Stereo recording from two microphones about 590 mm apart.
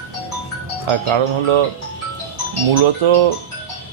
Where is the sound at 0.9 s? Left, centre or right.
Right.